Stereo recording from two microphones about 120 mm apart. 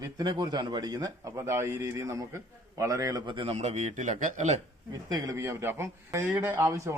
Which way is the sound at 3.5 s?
70° right (ahead or behind).